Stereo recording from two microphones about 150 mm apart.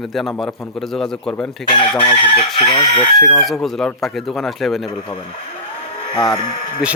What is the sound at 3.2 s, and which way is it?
A man's voice, centre (ahead or behind).